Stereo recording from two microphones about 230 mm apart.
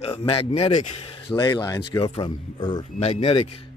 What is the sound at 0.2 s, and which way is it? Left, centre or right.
Speech, left.